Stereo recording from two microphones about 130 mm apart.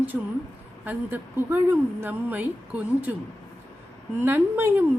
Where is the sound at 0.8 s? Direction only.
15° right (ahead or behind).